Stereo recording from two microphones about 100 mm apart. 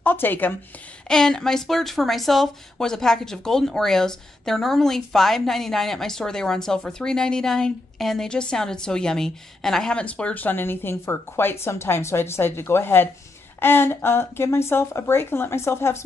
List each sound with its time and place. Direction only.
0.0 s speech: 20° left (ahead or behind)
1.0 s speech: 5° left (ahead or behind); by 16.0 s 25° left (ahead or behind)